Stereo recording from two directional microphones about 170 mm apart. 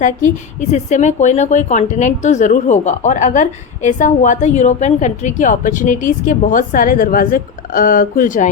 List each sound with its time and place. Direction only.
0.7 s a woman's voice: 45° left (ahead or behind)